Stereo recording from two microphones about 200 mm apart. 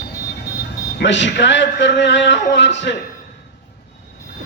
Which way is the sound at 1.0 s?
65° left (ahead or behind).